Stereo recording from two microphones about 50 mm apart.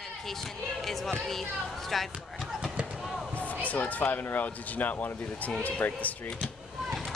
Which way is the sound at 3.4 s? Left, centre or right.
Left.